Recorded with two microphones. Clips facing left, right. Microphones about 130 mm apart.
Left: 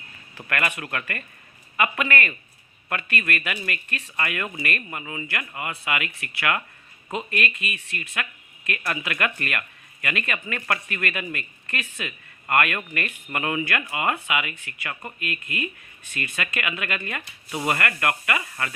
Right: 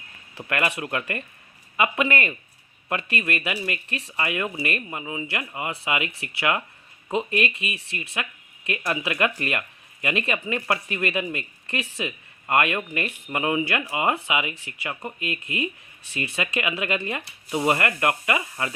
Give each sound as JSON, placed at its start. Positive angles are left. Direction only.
{"t": 0.3, "sound": "speech", "side_deg": -20}